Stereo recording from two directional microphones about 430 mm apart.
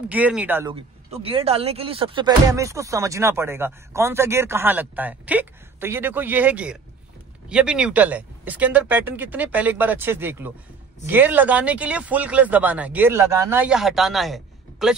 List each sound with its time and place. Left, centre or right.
0.1 s speech: centre